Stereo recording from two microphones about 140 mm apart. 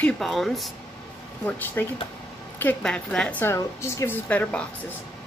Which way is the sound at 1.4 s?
15° left (ahead or behind).